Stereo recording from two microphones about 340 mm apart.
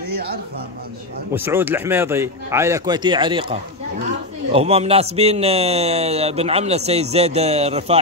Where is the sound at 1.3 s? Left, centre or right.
Centre.